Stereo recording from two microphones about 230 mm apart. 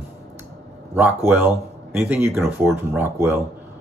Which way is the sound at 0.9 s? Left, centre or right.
Centre.